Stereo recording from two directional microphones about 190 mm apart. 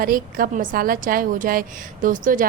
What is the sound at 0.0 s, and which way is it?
A woman's voice, 50° right (ahead or behind).